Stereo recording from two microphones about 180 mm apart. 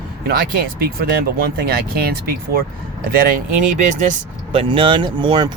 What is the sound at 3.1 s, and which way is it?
Speech, 50° right (ahead or behind).